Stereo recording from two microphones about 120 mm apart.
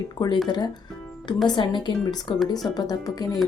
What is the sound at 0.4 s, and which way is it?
A woman's voice, 35° left (ahead or behind).